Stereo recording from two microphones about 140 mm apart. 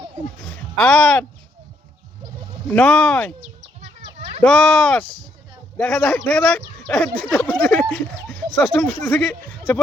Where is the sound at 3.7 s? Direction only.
50° right (ahead or behind).